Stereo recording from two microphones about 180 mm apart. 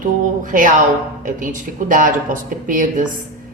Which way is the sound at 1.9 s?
45° right (ahead or behind).